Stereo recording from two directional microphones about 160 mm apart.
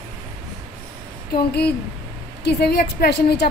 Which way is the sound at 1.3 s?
90° left.